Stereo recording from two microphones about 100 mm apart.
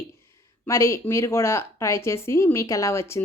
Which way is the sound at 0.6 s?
25° left (ahead or behind).